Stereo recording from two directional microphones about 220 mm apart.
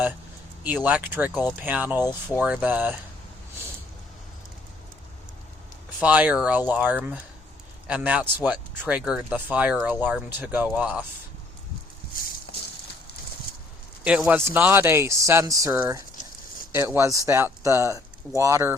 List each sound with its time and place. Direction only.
0.9 s speech: 10° right (ahead or behind)
6.0 s speech: 5° right (ahead or behind)
12.5 s clip-clop: 50° left (ahead or behind)
14.0 s speech: 5° right (ahead or behind)